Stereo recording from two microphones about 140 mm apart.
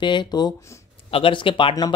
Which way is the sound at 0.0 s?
35° left (ahead or behind).